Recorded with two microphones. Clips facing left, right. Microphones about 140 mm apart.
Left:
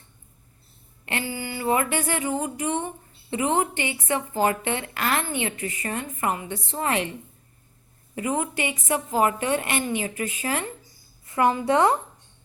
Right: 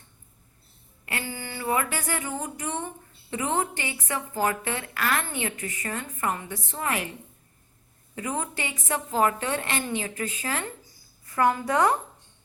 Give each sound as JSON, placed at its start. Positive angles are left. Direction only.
{"t": 1.3, "sound": "speech", "side_deg": 15}
{"t": 8.1, "sound": "a woman's voice", "side_deg": 20}